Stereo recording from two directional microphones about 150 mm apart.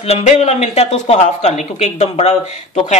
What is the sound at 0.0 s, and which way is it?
Speech, 45° left (ahead or behind).